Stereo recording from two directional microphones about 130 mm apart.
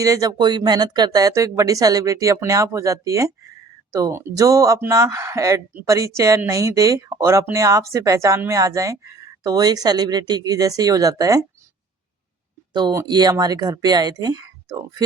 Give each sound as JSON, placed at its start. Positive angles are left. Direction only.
{"t": 0.0, "sound": "speech", "side_deg": -25}
{"t": 12.7, "sound": "speech", "side_deg": -35}